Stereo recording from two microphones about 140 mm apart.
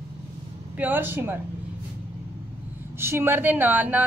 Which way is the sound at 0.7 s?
15° right (ahead or behind).